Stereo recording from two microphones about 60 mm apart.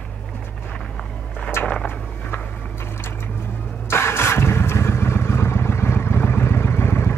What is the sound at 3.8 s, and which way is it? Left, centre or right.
Vehicle, left.